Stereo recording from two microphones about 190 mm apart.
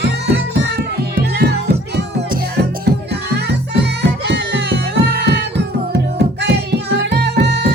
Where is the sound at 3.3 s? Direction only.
60° right (ahead or behind).